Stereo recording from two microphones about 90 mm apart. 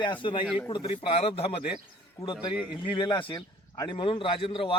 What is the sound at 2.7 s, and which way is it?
A man's voice, 60° left (ahead or behind).